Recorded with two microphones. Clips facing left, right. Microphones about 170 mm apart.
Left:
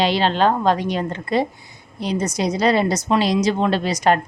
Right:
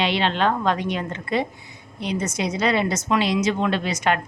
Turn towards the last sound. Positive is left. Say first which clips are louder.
# left 4 dB
turn(degrees=35)  # may be behind; listen again after turning